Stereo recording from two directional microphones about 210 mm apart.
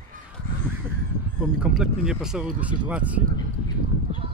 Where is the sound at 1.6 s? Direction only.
5° right (ahead or behind).